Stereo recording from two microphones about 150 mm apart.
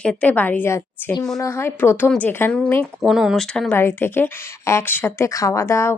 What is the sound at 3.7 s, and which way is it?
Speech, 15° left (ahead or behind).